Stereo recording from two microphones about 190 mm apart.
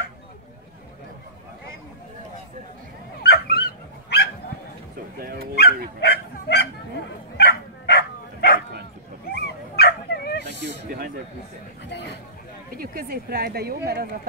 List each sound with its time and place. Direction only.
3.2 s dog: 55° left (ahead or behind)
5.2 s dog: 50° right (ahead or behind)
5.9 s bow-wow: 60° left (ahead or behind)
9.3 s dog: 55° left (ahead or behind)
10.4 s a sound: 65° right (ahead or behind)
12.7 s speech: 50° right (ahead or behind)